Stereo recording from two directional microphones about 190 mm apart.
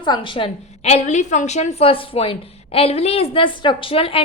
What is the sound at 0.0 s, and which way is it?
A woman's voice, 25° left (ahead or behind).